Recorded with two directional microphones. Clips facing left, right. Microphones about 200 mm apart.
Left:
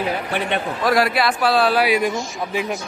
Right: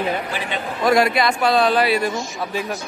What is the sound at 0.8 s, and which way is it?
Speech, centre (ahead or behind).